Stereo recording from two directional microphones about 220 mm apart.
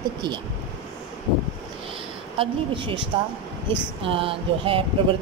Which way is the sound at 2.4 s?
25° right (ahead or behind).